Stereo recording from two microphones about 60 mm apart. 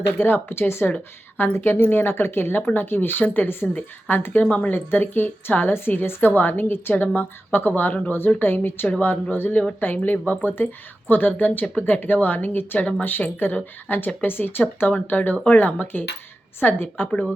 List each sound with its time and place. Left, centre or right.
0.2 s speech: left
4.4 s speech: left
4.7 s speech: left